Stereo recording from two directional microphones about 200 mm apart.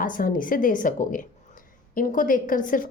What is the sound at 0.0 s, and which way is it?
A woman's voice, 45° left (ahead or behind).